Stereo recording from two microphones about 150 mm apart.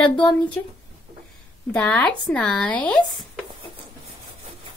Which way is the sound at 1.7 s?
5° left (ahead or behind).